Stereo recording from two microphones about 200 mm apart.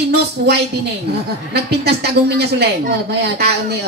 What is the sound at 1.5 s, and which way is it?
A woman's voice, 55° right (ahead or behind).